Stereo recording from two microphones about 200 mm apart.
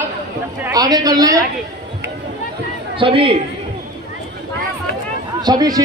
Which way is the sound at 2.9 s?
25° right (ahead or behind).